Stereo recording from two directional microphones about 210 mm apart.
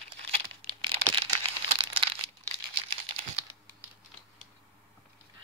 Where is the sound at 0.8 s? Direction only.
25° right (ahead or behind).